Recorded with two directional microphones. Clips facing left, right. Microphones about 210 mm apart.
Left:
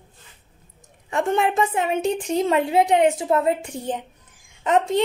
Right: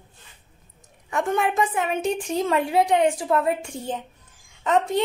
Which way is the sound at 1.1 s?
25° left (ahead or behind).